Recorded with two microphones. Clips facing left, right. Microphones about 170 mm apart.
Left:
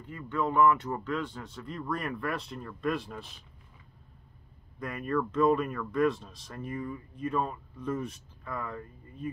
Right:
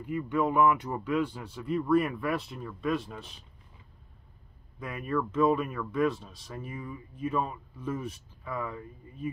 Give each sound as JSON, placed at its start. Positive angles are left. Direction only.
{"t": 0.0, "sound": "speech", "side_deg": -10}
{"t": 4.7, "sound": "speech", "side_deg": -5}